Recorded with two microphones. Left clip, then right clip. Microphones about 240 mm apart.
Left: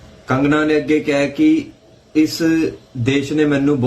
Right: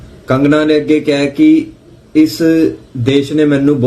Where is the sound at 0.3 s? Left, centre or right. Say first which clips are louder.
Right 5 dB; centre.